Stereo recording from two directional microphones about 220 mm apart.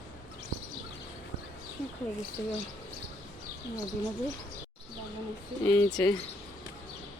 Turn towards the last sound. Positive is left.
turn(degrees=10)  # may be behind; listen again after turning